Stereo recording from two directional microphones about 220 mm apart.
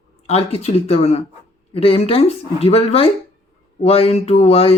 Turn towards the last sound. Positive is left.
turn(degrees=25)  # may be behind; listen again after turning